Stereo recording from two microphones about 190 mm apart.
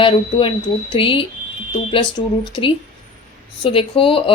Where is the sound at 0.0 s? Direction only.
25° left (ahead or behind).